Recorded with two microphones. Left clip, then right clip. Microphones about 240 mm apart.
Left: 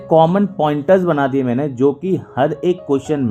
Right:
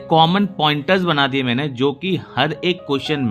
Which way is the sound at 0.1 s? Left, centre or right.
Right.